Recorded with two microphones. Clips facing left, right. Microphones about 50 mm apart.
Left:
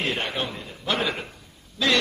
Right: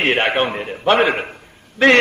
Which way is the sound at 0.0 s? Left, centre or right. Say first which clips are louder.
Right 10 dB; right.